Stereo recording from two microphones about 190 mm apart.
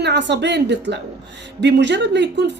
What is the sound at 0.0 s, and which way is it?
Speech, 65° right (ahead or behind).